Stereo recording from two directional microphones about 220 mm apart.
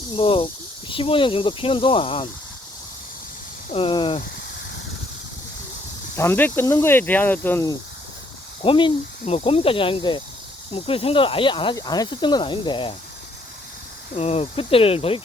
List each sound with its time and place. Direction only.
0.1 s speech: 25° left (ahead or behind)
3.7 s speech: 25° left (ahead or behind)
6.1 s speech: 10° left (ahead or behind)
8.6 s speech: 25° left (ahead or behind)
14.2 s speech: 30° left (ahead or behind)